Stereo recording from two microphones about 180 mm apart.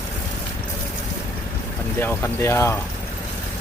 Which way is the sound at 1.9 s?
10° left (ahead or behind).